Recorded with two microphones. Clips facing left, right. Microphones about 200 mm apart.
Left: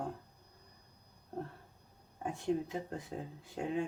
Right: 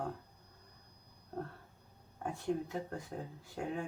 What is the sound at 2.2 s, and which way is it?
Speech, 20° left (ahead or behind).